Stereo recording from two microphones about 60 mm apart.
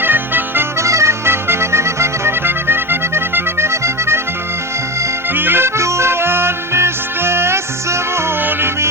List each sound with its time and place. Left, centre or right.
0.0 s music: right
0.8 s accordion: right
5.3 s music: right
8.4 s music: right